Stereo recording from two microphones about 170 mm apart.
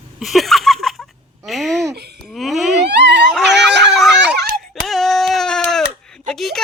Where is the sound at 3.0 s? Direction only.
90° right.